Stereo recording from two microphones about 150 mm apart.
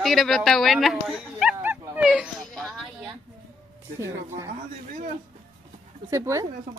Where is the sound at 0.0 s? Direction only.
Centre (ahead or behind).